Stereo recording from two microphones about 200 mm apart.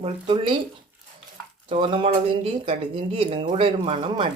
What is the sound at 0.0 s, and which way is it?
Speech, 25° right (ahead or behind).